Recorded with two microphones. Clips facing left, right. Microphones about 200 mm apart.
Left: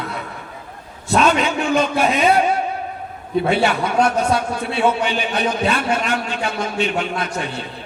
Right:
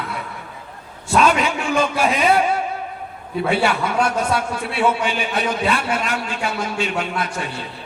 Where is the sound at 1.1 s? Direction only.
25° left (ahead or behind).